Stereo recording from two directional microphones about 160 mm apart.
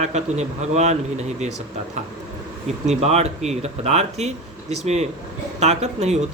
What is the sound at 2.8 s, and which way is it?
Speech, 40° right (ahead or behind).